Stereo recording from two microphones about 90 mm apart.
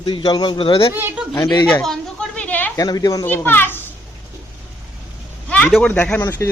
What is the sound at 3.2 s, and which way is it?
Speech, 25° left (ahead or behind).